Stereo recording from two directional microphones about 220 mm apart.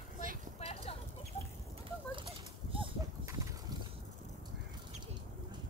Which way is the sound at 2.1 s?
25° right (ahead or behind).